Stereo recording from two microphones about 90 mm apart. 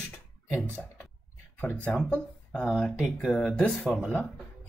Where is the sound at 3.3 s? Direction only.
10° left (ahead or behind).